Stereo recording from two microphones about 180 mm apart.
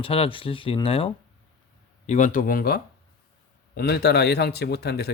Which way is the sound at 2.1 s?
40° left (ahead or behind).